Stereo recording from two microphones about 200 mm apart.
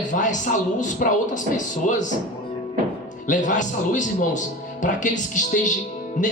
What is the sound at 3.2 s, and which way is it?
A man's voice, 40° left (ahead or behind).